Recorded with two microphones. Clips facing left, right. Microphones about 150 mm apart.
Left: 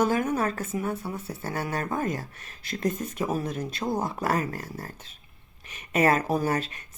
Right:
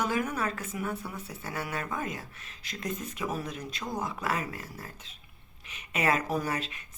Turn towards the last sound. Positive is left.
turn(degrees=40)  # may be behind; listen again after turning